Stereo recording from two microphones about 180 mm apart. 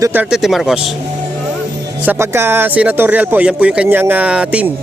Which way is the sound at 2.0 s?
10° right (ahead or behind).